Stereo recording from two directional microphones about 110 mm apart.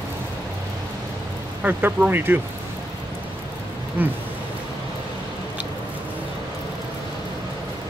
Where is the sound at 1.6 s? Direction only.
15° right (ahead or behind).